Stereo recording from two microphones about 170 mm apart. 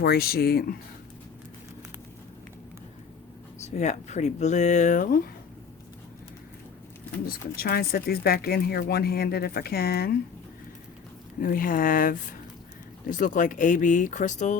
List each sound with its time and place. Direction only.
0.0 s speech: 65° left (ahead or behind)
3.6 s speech: 45° left (ahead or behind)
7.3 s speech: 60° left (ahead or behind)
11.3 s speech: 55° left (ahead or behind)